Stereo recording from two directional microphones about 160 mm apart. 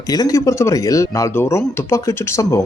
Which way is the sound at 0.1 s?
20° left (ahead or behind).